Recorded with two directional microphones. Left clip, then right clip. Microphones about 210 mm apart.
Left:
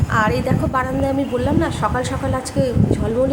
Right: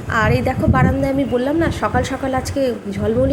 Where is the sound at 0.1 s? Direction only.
10° right (ahead or behind).